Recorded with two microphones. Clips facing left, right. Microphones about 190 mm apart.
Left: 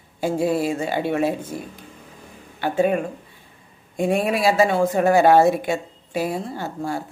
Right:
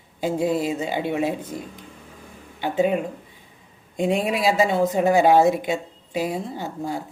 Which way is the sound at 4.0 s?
20° right (ahead or behind).